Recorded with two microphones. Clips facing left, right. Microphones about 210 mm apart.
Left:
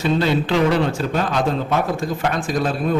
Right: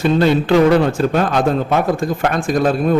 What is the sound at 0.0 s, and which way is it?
A man's voice, 50° right (ahead or behind).